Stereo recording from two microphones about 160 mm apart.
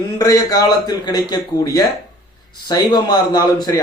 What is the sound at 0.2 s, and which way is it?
A man's voice, 20° left (ahead or behind).